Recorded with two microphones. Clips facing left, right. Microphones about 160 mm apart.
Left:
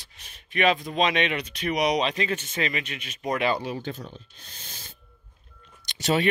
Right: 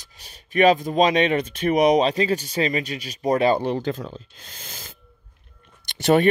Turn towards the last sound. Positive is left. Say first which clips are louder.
# right 7 dB
turn(degrees=-55)  # may be behind; listen again after turning